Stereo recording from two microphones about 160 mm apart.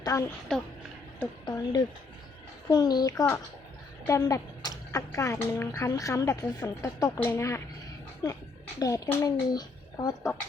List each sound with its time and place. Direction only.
0.0 s speech: 20° left (ahead or behind)
0.5 s speech: 5° left (ahead or behind)
1.5 s a woman's voice: 25° left (ahead or behind)